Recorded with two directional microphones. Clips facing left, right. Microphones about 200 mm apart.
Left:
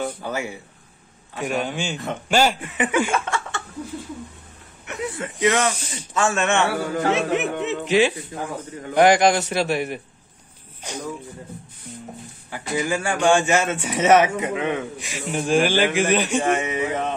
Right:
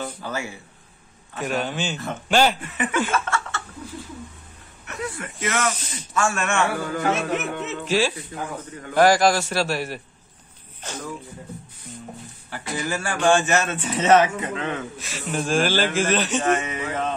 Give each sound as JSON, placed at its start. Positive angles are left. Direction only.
{"t": 0.0, "sound": "a man's voice", "side_deg": 15}
{"t": 3.1, "sound": "laughter", "side_deg": 15}
{"t": 5.1, "sound": "a man's voice", "side_deg": 20}
{"t": 12.4, "sound": "a man's voice", "side_deg": 15}